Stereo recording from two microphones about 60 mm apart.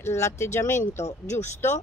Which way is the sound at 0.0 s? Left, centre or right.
Left.